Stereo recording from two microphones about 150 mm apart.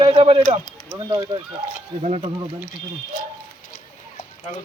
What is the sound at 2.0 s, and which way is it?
Speech, 45° right (ahead or behind).